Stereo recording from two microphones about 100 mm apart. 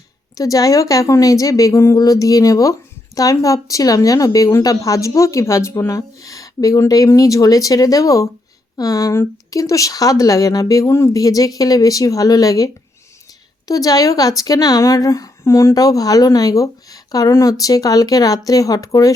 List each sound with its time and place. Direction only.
0.3 s a woman's voice: 35° left (ahead or behind)